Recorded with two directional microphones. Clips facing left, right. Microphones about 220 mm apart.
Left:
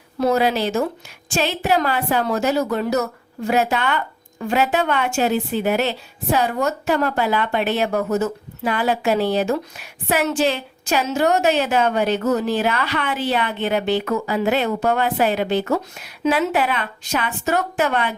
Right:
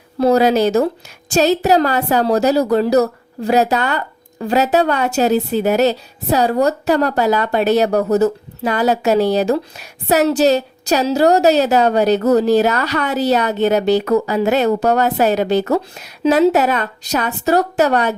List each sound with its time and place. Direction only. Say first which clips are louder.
0.2 s a woman's voice: right 6 dB; 35° right (ahead or behind)